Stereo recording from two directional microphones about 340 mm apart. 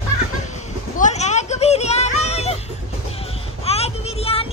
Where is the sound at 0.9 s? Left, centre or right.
Left.